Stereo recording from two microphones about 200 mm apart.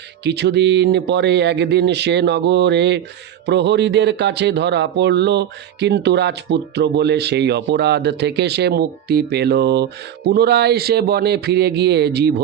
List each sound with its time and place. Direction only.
0.3 s speech: 60° right (ahead or behind)